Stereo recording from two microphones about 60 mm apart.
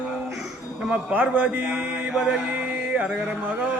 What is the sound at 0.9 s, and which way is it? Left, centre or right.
Speech, right.